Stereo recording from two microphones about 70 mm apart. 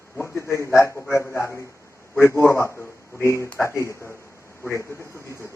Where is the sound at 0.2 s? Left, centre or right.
Left.